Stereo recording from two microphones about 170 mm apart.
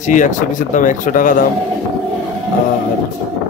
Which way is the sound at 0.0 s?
45° left (ahead or behind).